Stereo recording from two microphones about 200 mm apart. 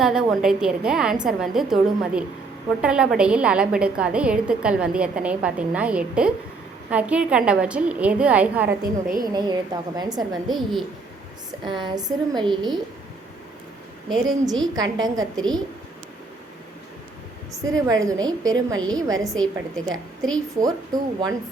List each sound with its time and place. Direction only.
0.0 s a woman's voice: 5° right (ahead or behind)
8.8 s a woman's voice: 45° right (ahead or behind)
9.2 s a woman's voice: 20° right (ahead or behind)
10.5 s a woman's voice: centre (ahead or behind)
11.6 s a woman's voice: 20° right (ahead or behind)
14.8 s a woman's voice: 20° right (ahead or behind)
17.7 s a woman's voice: 15° right (ahead or behind)
19.2 s a woman's voice: centre (ahead or behind)
20.6 s a woman's voice: 20° right (ahead or behind)